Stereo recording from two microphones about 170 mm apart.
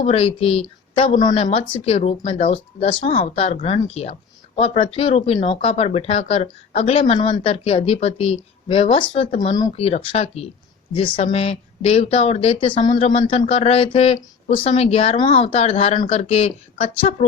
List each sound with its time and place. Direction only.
0.0 s speech: 35° left (ahead or behind)